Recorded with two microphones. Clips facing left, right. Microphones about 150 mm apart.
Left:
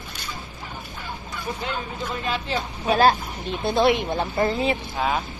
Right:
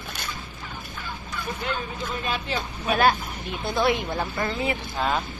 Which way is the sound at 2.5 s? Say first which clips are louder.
Left 5 dB; 30° left (ahead or behind).